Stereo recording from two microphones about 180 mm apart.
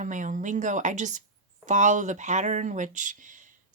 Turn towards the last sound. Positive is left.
turn(degrees=-45)  # may be behind; listen again after turning